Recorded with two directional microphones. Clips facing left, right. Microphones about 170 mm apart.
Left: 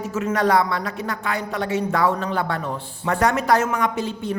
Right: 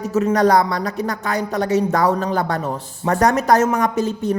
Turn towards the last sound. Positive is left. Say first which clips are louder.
# right 5 dB
turn(degrees=-45)  # may be behind; listen again after turning